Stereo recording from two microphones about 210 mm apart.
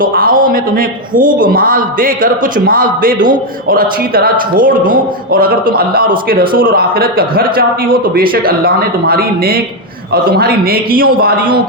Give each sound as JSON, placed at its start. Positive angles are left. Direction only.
{"t": 0.0, "sound": "a man's voice", "side_deg": -45}